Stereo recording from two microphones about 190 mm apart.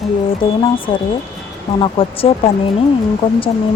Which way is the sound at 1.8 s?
30° left (ahead or behind).